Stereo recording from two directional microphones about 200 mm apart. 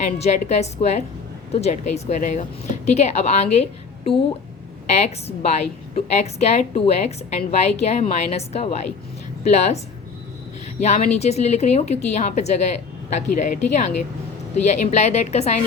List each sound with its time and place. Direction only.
0.2 s a woman's voice: 35° left (ahead or behind)